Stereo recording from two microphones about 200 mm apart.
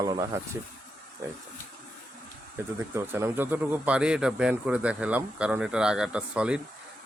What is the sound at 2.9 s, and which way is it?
Speech, 10° right (ahead or behind).